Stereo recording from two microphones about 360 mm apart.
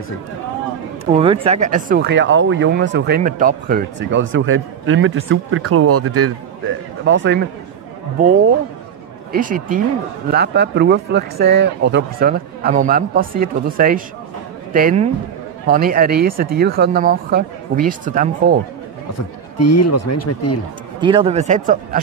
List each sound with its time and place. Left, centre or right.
1.1 s speech: centre
9.3 s speech: right
19.1 s speech: left
21.0 s speech: centre